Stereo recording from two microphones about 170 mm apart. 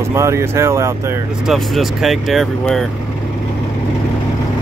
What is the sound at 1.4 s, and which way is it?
Speech, centre (ahead or behind).